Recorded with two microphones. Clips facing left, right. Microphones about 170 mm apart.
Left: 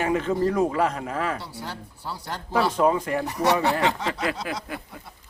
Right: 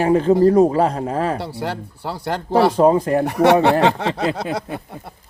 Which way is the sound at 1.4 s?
65° right (ahead or behind).